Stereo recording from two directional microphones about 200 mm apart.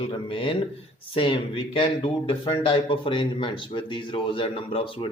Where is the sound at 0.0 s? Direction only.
25° left (ahead or behind).